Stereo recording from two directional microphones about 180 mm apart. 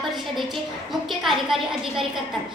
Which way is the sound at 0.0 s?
Centre (ahead or behind).